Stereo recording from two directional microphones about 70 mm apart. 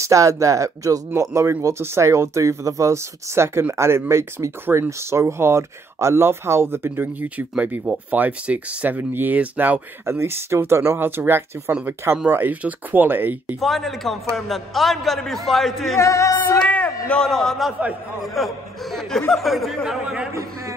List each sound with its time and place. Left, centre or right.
0.0 s speech: right
10.0 s speech: right
13.6 s a man's voice: centre
16.0 s music: left
16.4 s a sound: left
17.3 s a man's voice: centre